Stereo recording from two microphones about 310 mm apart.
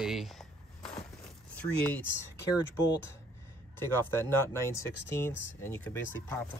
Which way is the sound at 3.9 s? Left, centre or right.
Centre.